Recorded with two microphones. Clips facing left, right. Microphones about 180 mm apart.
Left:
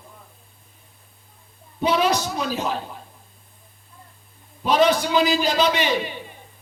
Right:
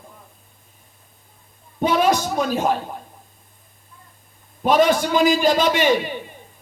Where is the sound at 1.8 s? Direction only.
50° right (ahead or behind).